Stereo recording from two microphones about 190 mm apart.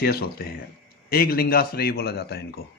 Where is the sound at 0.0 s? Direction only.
55° left (ahead or behind).